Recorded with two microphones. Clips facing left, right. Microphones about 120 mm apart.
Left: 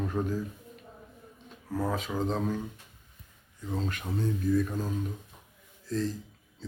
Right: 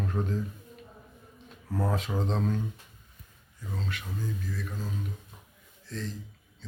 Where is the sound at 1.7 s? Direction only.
Centre (ahead or behind).